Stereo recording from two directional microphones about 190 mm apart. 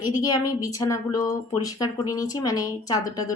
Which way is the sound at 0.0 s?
20° left (ahead or behind).